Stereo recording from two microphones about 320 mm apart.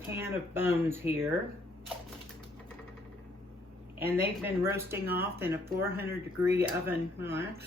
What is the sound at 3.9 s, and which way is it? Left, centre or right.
Speech, centre.